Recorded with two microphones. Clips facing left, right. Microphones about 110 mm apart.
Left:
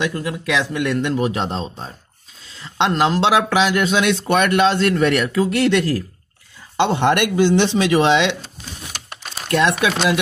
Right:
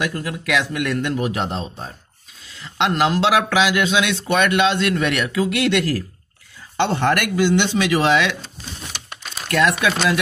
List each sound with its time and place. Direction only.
0.0 s speech: 25° left (ahead or behind)
3.4 s a man's voice: 40° left (ahead or behind)
6.8 s speech: 20° left (ahead or behind)
9.5 s speech: 25° left (ahead or behind)